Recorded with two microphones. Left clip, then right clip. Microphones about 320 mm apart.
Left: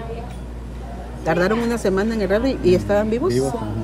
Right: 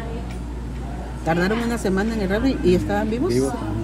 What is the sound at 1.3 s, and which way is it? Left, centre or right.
Speech, centre.